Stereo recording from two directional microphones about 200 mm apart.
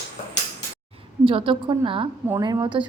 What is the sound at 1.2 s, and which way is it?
Speech, 25° right (ahead or behind).